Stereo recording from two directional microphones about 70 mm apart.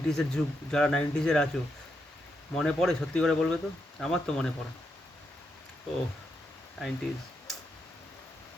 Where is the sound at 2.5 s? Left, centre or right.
Centre.